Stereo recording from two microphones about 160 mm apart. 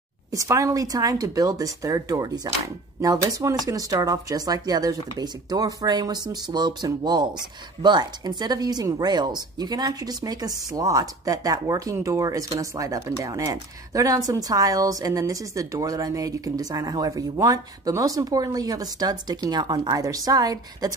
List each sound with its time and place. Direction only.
0.3 s speech: 20° right (ahead or behind)